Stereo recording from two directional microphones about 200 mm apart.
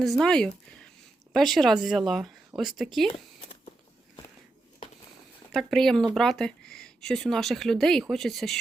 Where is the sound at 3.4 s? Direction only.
25° left (ahead or behind).